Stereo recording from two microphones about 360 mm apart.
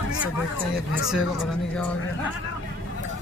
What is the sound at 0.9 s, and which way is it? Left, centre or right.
Speech, centre.